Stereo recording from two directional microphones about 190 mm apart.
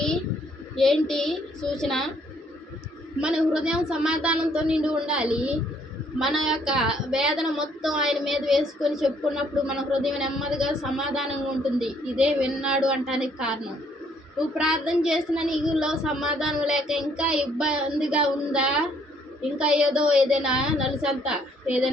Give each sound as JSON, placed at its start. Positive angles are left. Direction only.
{"t": 0.8, "sound": "a woman's voice", "side_deg": 0}
{"t": 3.2, "sound": "a woman's voice", "side_deg": -5}
{"t": 14.6, "sound": "a woman's voice", "side_deg": -5}